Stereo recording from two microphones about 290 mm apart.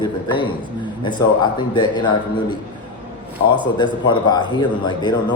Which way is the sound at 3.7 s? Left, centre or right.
Centre.